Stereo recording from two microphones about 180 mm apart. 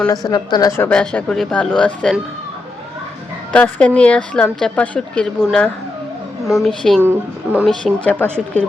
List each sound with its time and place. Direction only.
0.3 s a woman's voice: 20° left (ahead or behind)
0.9 s speech: 5° left (ahead or behind)
3.5 s speech: 5° left (ahead or behind)
7.0 s speech: 10° right (ahead or behind)
7.7 s speech: 5° left (ahead or behind)